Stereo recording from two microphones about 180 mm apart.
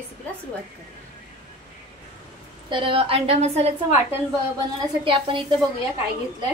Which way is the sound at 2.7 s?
30° right (ahead or behind).